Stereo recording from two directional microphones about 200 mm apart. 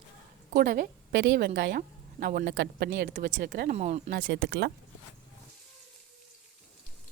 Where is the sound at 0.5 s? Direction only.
50° right (ahead or behind).